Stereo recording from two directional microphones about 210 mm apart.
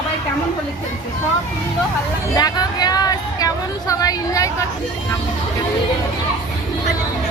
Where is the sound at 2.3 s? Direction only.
20° left (ahead or behind).